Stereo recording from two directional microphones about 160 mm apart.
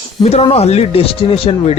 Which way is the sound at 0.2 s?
40° left (ahead or behind).